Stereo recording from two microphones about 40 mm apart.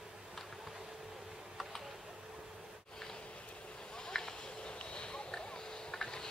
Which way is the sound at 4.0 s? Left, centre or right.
Centre.